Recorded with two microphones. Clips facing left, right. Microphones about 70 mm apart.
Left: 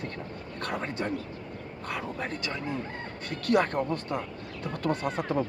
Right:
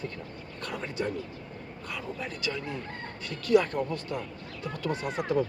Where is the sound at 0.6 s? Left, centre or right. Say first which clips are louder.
Left 1 dB; left.